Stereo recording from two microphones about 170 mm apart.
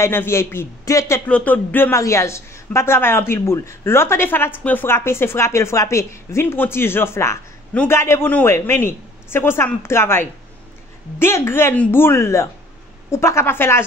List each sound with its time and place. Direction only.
0.0 s a man's voice: 15° left (ahead or behind)